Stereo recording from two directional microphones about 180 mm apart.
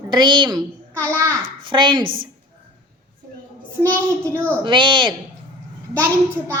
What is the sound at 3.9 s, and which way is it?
Speech, 15° right (ahead or behind).